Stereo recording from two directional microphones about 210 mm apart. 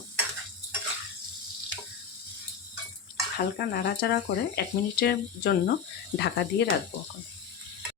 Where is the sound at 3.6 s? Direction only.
50° left (ahead or behind).